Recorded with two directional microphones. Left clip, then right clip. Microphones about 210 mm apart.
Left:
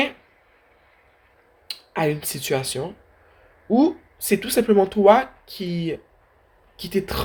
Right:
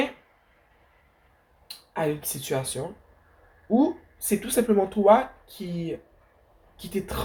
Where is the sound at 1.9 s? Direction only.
45° left (ahead or behind).